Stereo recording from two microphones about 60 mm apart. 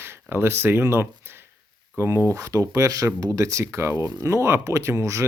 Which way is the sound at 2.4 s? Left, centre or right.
Right.